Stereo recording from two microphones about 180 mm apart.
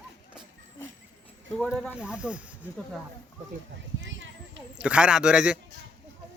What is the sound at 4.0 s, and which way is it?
Clip-clop, 90° right.